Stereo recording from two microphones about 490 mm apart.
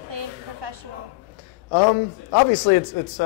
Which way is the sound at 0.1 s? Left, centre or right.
Right.